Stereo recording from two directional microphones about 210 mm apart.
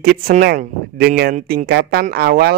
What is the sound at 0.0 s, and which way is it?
Speech, 45° right (ahead or behind).